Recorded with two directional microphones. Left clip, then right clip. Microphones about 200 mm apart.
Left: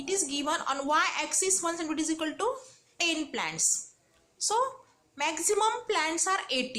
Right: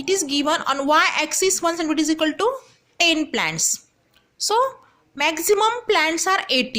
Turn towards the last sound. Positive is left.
turn(degrees=-50)  # may be behind; listen again after turning